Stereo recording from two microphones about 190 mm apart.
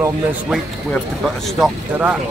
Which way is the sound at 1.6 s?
10° right (ahead or behind).